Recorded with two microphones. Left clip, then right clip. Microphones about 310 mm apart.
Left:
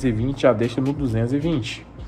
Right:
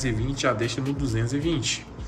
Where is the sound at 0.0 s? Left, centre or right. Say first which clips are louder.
Left 7 dB; centre.